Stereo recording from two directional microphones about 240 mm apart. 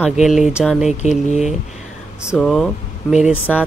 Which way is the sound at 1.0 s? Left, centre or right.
Left.